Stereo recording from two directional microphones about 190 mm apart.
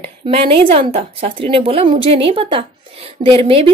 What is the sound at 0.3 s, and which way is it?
Speech, 30° right (ahead or behind).